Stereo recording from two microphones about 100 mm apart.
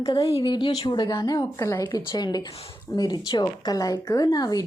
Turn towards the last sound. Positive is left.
turn(degrees=40)  # may be behind; listen again after turning